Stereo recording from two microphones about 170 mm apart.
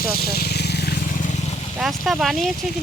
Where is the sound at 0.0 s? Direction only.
65° left (ahead or behind); by 1.5 s 45° left (ahead or behind).